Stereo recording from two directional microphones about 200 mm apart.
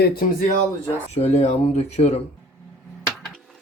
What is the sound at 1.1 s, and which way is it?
Speech, 30° left (ahead or behind).